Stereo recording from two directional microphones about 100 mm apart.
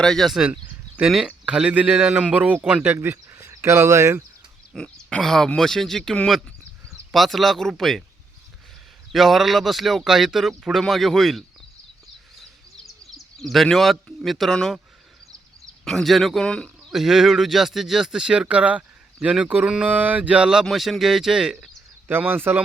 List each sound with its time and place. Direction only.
0.0 s speech: 5° left (ahead or behind)
0.4 s a sound: 10° right (ahead or behind)
1.5 s speech: 10° right (ahead or behind); by 4.2 s 30° right (ahead or behind)
4.7 s speech: 5° left (ahead or behind)
9.1 s speech: centre (ahead or behind)
12.4 s bird: centre (ahead or behind)
13.1 s speech: centre (ahead or behind)
15.8 s speech: 5° left (ahead or behind)
22.0 s speech: 20° right (ahead or behind)